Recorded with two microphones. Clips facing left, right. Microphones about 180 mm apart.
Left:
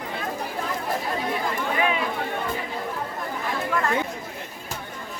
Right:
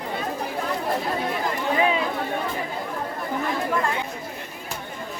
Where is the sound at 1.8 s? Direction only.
30° right (ahead or behind).